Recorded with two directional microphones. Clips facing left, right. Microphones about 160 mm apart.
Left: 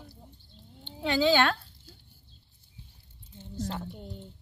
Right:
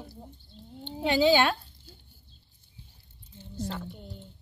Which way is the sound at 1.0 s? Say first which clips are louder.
Right 2 dB; 15° right (ahead or behind).